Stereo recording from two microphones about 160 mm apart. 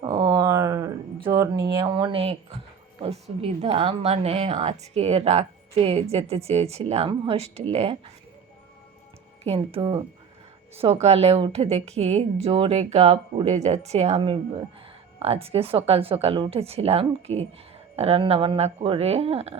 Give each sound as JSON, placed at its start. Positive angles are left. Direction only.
{"t": 0.0, "sound": "a sound", "side_deg": -25}
{"t": 1.8, "sound": "speech", "side_deg": -30}
{"t": 9.4, "sound": "speech", "side_deg": -35}
{"t": 11.0, "sound": "speech", "side_deg": -40}
{"t": 15.2, "sound": "speech", "side_deg": -40}